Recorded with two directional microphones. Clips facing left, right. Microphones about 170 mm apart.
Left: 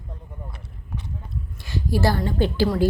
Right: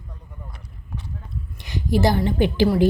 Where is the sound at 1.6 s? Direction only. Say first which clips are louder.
Right 3 dB; 20° right (ahead or behind).